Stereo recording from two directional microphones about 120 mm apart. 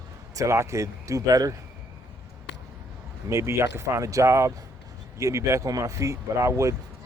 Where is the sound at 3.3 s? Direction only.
25° right (ahead or behind).